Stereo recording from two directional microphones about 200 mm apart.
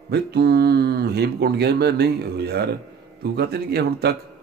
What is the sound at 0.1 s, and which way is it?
Speech, 55° right (ahead or behind).